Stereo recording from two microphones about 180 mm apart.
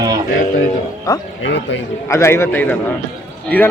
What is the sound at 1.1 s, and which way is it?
Speech, 20° left (ahead or behind).